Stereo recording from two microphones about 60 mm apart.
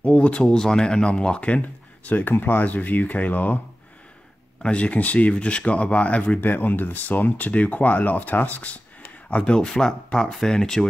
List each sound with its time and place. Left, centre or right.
0.0 s speech: centre
2.0 s speech: left
4.6 s speech: left
6.5 s speech: left
9.4 s speech: centre